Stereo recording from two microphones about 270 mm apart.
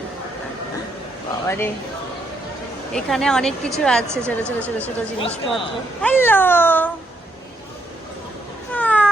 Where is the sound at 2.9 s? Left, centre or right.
Centre.